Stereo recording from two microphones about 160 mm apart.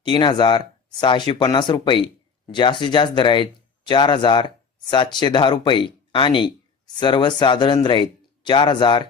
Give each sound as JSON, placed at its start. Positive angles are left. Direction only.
{"t": 0.0, "sound": "speech", "side_deg": 30}